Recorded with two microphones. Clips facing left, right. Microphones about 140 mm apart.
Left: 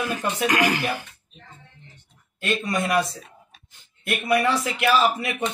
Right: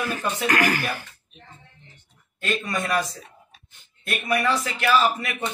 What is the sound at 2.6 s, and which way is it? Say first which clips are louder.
Speech: left 4 dB; 15° left (ahead or behind).